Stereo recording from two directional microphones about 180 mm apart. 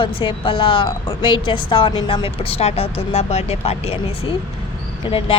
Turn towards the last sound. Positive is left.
turn(degrees=30)  # may be behind; listen again after turning